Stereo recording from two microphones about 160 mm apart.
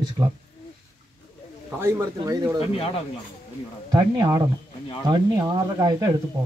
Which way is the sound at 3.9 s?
25° right (ahead or behind).